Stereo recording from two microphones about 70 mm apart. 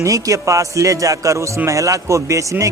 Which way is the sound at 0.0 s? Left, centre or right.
Right.